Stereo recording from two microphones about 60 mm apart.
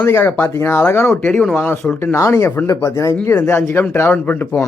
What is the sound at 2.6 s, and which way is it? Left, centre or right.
Speech, left.